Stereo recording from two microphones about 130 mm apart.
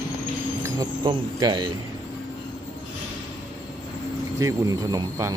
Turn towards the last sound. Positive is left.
turn(degrees=-25)  # may be behind; listen again after turning